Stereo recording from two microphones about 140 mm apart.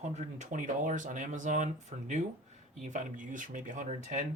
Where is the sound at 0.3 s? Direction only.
65° right (ahead or behind).